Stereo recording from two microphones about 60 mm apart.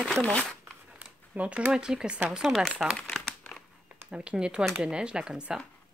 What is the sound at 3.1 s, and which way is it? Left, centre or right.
Crumpling, centre.